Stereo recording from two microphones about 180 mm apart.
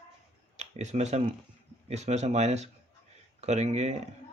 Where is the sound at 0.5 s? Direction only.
40° right (ahead or behind).